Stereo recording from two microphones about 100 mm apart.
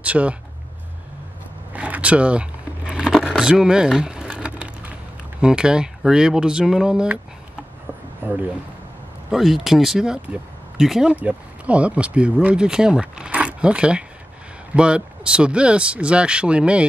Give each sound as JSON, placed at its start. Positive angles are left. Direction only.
{"t": 0.0, "sound": "speech", "side_deg": -15}
{"t": 1.7, "sound": "a sound", "side_deg": -15}
{"t": 5.4, "sound": "speech", "side_deg": -10}
{"t": 8.2, "sound": "speech", "side_deg": -20}
{"t": 9.3, "sound": "speech", "side_deg": 0}